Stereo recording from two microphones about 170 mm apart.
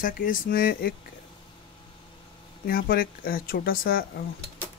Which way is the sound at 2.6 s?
60° left (ahead or behind).